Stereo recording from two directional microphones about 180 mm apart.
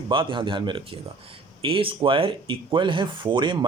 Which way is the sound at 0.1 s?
30° right (ahead or behind).